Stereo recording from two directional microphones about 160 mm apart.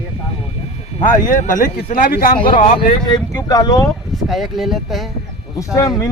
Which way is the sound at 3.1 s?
25° left (ahead or behind).